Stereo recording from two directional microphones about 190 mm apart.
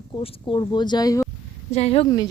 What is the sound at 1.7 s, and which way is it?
Speech, 35° left (ahead or behind).